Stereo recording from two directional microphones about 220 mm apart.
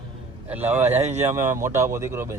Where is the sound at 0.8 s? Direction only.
30° right (ahead or behind).